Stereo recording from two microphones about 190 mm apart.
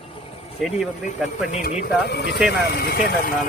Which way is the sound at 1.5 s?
40° left (ahead or behind).